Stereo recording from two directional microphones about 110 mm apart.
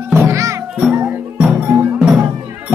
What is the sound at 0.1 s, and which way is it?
Music, 20° right (ahead or behind).